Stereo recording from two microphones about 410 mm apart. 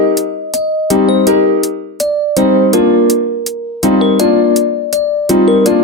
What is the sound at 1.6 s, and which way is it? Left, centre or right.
Music, centre.